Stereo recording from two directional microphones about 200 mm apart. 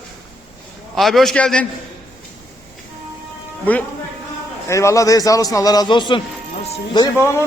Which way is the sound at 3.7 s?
10° left (ahead or behind).